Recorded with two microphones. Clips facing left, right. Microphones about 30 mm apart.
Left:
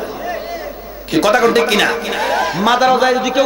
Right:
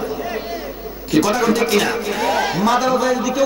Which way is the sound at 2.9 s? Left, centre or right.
Left.